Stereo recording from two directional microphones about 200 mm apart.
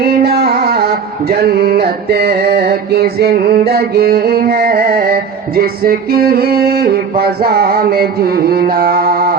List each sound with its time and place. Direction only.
0.0 s music: 50° right (ahead or behind)